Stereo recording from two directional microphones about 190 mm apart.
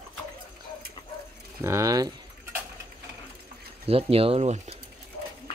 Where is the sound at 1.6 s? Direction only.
15° right (ahead or behind).